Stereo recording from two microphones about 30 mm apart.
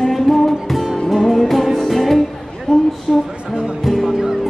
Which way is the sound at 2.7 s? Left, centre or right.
Left.